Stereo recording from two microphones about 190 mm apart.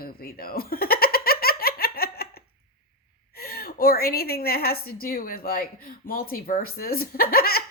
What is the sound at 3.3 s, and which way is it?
A woman's voice, 55° left (ahead or behind).